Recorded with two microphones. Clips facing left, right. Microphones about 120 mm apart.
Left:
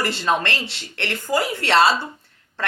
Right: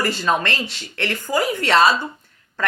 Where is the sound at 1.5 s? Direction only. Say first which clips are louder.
Right 2 dB; 50° right (ahead or behind).